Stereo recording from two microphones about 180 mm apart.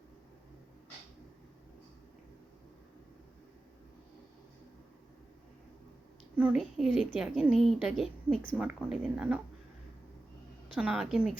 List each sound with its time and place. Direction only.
6.3 s a woman's voice: 5° right (ahead or behind)
10.8 s a woman's voice: 5° right (ahead or behind)